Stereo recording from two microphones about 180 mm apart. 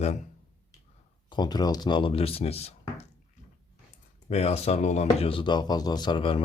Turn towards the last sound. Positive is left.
turn(degrees=30)  # may be behind; listen again after turning